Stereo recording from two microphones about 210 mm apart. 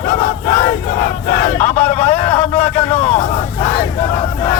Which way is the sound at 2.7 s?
30° left (ahead or behind).